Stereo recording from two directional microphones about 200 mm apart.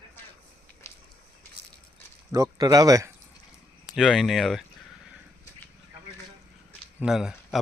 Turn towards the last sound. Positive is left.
turn(degrees=-5)  # may be behind; listen again after turning